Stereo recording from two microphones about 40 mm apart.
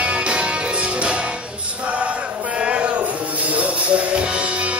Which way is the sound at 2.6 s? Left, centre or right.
Right.